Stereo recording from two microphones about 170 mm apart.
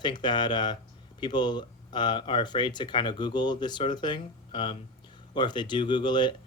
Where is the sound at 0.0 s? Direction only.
25° left (ahead or behind).